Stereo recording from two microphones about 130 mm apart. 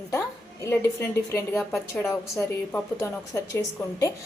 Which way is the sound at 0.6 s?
20° left (ahead or behind).